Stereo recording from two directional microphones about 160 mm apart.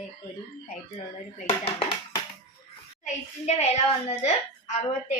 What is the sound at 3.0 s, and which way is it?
A child's voice, 45° left (ahead or behind).